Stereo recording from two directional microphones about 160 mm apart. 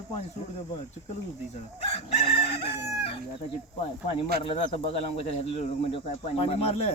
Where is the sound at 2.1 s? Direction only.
35° left (ahead or behind).